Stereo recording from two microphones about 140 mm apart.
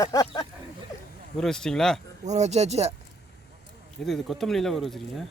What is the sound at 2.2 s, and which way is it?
Speech, 55° right (ahead or behind).